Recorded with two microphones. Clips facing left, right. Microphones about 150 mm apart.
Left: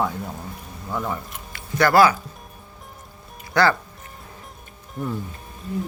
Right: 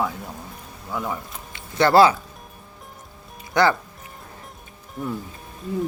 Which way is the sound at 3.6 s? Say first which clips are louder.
Even; 20° right (ahead or behind).